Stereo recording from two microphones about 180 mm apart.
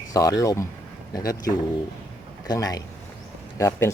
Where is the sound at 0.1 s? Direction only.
20° left (ahead or behind).